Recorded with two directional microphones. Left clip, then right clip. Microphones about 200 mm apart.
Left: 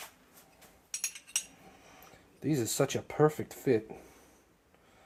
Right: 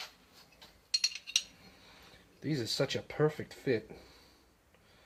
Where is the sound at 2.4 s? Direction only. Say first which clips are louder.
Left 3 dB; 35° left (ahead or behind).